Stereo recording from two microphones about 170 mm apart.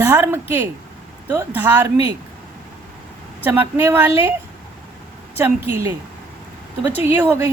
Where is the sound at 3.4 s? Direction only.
15° right (ahead or behind).